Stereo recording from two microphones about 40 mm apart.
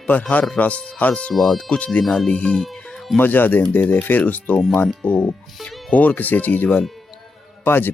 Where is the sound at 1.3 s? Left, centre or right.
Centre.